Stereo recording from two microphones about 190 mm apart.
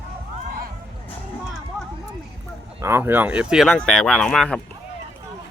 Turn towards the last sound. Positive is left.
turn(degrees=5)  # may be behind; listen again after turning